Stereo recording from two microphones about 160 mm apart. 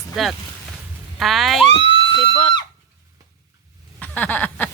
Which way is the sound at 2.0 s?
35° left (ahead or behind).